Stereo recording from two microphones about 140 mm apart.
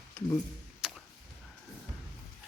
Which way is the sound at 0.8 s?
5° right (ahead or behind).